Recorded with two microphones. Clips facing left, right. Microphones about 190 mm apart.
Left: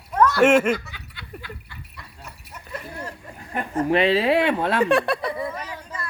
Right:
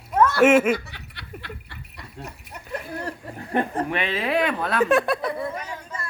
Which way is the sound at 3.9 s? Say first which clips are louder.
Left 6 dB; 35° left (ahead or behind).